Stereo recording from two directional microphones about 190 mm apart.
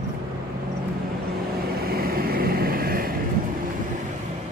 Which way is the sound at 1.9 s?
50° right (ahead or behind).